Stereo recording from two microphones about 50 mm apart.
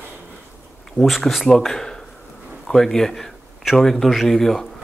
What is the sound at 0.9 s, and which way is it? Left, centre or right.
A man's voice, centre.